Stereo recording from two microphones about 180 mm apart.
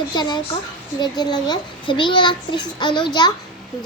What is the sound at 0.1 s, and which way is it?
A child's voice, 25° left (ahead or behind).